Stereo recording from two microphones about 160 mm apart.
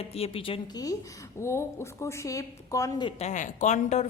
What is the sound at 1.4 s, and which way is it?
A woman's voice, 15° left (ahead or behind).